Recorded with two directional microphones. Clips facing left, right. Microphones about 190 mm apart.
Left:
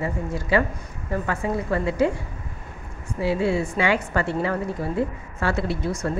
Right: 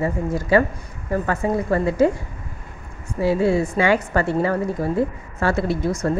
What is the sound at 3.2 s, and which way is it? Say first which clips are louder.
A woman's voice: right 4 dB; 40° right (ahead or behind).